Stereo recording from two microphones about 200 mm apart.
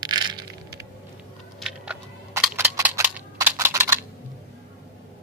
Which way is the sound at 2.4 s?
10° right (ahead or behind).